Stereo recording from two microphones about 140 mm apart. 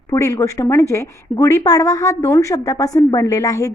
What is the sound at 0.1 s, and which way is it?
A woman's voice, 20° left (ahead or behind).